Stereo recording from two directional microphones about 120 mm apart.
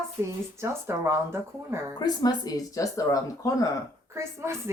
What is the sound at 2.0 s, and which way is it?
Speech, 35° left (ahead or behind).